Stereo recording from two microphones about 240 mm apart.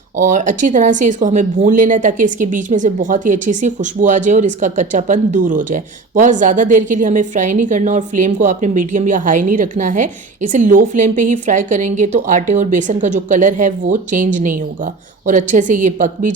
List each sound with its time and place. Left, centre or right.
0.2 s speech: right